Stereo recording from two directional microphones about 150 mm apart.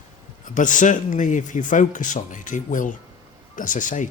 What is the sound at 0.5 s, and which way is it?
Speech, 60° left (ahead or behind).